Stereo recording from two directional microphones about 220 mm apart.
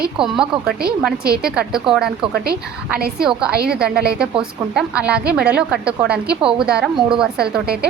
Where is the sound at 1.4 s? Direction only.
5° right (ahead or behind).